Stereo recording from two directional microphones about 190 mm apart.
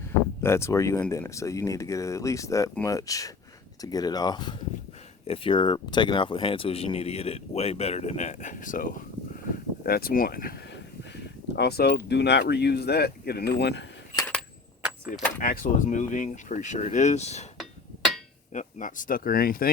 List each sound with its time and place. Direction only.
0.4 s speech: 15° left (ahead or behind); by 13.8 s 60° left (ahead or behind)
14.8 s keys jangling: 5° right (ahead or behind)
15.4 s speech: 45° left (ahead or behind)
18.5 s speech: 45° left (ahead or behind)